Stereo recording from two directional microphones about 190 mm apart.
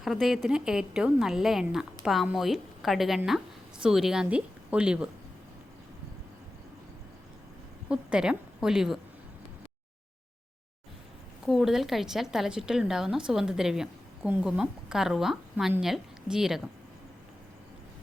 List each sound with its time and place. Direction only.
0.0 s a woman's voice: centre (ahead or behind)
7.9 s a woman's voice: 5° right (ahead or behind)
11.4 s a woman's voice: centre (ahead or behind)